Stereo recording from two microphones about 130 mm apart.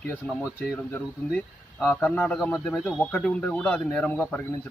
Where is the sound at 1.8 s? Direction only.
15° left (ahead or behind).